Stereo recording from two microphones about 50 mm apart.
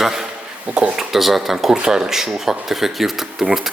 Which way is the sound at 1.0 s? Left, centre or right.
Centre.